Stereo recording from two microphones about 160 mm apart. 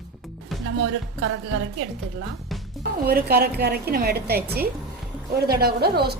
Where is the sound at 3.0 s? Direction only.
75° right (ahead or behind).